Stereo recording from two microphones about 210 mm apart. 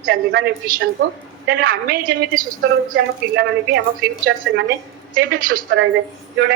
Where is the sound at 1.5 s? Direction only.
45° right (ahead or behind).